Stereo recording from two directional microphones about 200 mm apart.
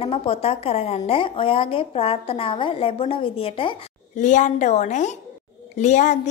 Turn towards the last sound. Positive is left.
turn(degrees=35)  # may be behind; listen again after turning